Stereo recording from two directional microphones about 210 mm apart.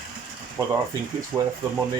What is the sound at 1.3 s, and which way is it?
Speech, 5° right (ahead or behind).